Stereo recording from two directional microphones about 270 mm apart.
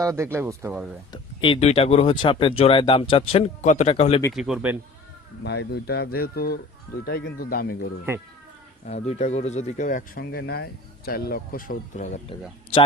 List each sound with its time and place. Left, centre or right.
0.0 s speech: centre
1.1 s speech: centre
4.3 s speech: centre
5.4 s speech: left
8.9 s speech: left